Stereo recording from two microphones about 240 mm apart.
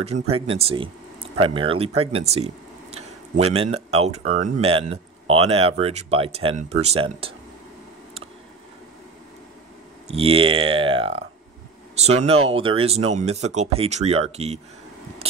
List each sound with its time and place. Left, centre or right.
0.0 s speech: right
10.0 s speech: right